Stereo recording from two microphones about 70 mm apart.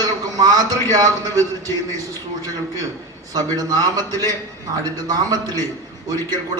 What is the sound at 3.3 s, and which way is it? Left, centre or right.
Speech, right.